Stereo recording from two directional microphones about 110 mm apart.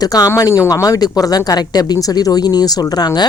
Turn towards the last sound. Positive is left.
turn(degrees=35)  # may be behind; listen again after turning